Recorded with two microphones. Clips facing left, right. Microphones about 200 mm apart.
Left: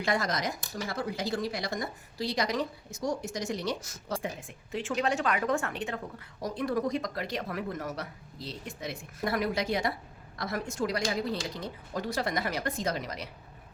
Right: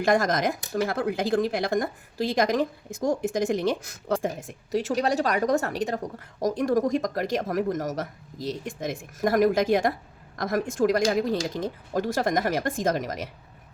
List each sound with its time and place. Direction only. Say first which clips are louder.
0.0 s a woman's voice: right 7 dB; 50° right (ahead or behind)